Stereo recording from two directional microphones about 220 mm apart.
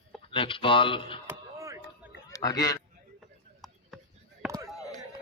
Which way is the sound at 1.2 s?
15° right (ahead or behind).